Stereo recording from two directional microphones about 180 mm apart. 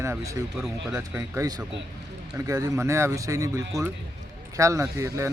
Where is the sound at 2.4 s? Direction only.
20° right (ahead or behind).